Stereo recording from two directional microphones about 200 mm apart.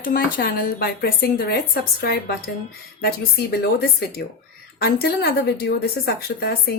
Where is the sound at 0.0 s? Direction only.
45° left (ahead or behind).